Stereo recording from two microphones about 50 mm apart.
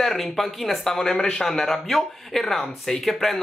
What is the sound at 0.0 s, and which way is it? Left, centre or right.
Speech, centre.